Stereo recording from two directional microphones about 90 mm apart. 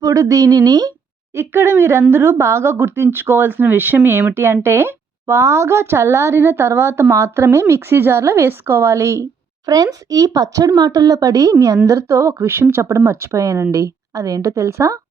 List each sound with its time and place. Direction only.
0.0 s speech: 35° right (ahead or behind)
1.4 s speech: 30° right (ahead or behind)
9.6 s a woman's voice: 45° right (ahead or behind)